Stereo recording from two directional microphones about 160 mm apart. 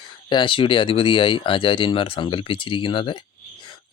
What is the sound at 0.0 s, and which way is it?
Speech, 30° left (ahead or behind).